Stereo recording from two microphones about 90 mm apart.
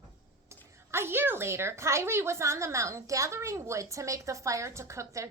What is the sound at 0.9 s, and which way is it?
A woman's voice, 25° right (ahead or behind).